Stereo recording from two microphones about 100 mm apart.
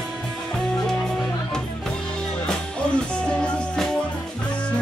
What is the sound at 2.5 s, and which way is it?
Music, 10° left (ahead or behind).